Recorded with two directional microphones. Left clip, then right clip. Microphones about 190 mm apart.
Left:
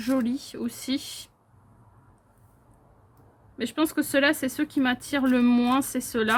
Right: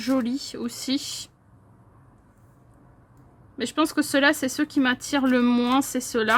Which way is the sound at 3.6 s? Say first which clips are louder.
Right 3 dB; 30° right (ahead or behind).